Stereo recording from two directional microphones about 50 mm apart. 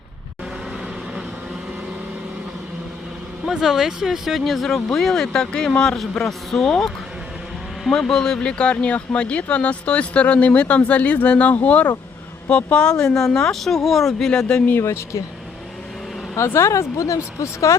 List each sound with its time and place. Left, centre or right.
3.5 s a man's voice: centre; by 11.9 s left
12.7 s speech: centre
14.3 s a man's voice: centre
14.8 s speech: left
16.6 s speech: left